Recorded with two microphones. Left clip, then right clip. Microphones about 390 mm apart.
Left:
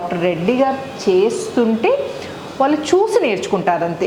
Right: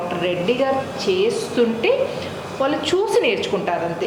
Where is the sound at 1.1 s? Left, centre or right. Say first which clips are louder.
Left 5 dB; left.